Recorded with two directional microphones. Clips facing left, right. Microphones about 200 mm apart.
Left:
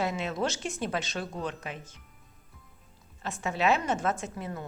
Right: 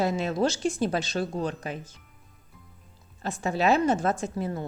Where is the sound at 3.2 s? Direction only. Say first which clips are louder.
Right 3 dB; 35° right (ahead or behind).